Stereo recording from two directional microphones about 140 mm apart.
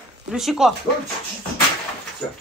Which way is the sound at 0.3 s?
5° right (ahead or behind).